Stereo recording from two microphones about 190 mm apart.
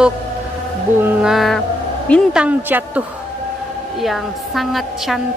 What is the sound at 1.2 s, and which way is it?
A woman's voice, centre (ahead or behind).